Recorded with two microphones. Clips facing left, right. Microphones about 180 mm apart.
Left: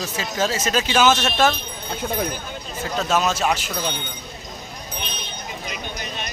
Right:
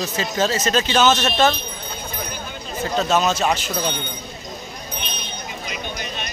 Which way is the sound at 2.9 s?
5° left (ahead or behind).